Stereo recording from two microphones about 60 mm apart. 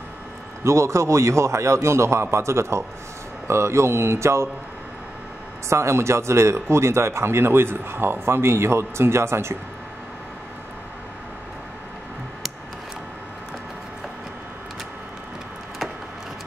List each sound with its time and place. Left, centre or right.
0.7 s speech: right
5.7 s speech: right